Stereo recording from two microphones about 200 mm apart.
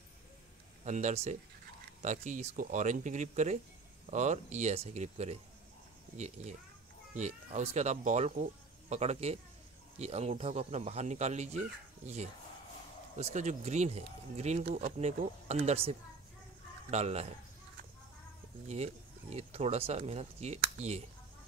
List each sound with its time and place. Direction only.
0.8 s speech: 35° right (ahead or behind)
13.2 s speech: 35° right (ahead or behind)
19.3 s speech: 30° right (ahead or behind)